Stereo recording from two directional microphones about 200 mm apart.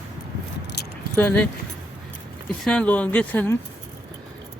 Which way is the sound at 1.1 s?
10° left (ahead or behind).